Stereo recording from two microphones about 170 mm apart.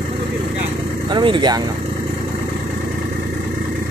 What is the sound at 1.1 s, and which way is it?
Speech, 30° right (ahead or behind).